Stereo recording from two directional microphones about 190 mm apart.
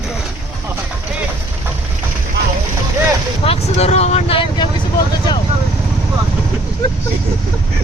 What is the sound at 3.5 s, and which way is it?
Speech, 35° left (ahead or behind).